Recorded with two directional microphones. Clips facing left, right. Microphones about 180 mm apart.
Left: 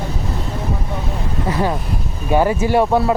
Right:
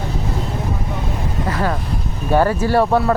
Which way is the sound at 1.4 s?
15° left (ahead or behind).